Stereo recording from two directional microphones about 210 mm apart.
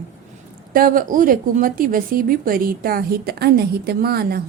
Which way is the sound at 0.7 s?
40° right (ahead or behind).